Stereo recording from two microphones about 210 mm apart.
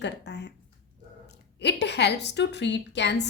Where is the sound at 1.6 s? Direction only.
55° left (ahead or behind).